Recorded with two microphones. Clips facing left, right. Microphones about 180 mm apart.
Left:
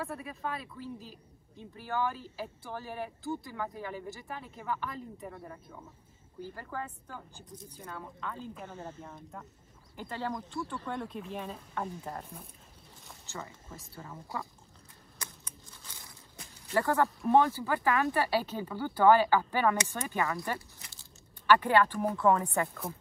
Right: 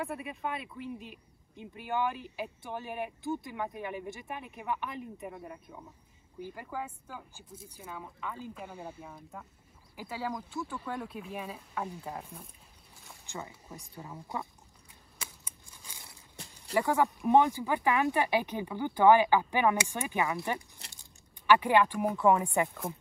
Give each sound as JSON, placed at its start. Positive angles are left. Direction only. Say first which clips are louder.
{"t": 0.0, "sound": "speech", "louder": "right 1 dB", "side_deg": -15}
{"t": 13.3, "sound": "speech", "louder": "right 1 dB", "side_deg": -15}
{"t": 15.2, "sound": "scissors", "louder": "left 2 dB", "side_deg": -10}
{"t": 16.7, "sound": "speech", "louder": "even", "side_deg": -15}